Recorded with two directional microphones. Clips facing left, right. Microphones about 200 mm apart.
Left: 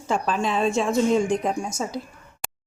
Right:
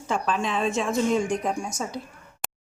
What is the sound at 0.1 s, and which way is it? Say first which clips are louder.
A woman's voice: left 2 dB; 35° left (ahead or behind).